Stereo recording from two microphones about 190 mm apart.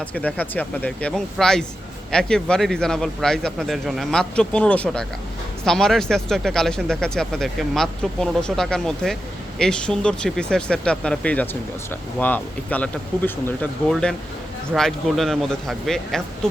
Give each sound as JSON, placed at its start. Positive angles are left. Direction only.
{"t": 0.0, "sound": "speech", "side_deg": 5}